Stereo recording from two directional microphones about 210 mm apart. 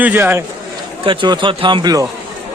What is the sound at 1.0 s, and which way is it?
Speech, 25° right (ahead or behind).